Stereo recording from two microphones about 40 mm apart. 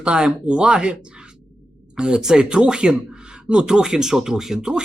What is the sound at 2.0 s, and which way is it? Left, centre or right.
Speech, centre.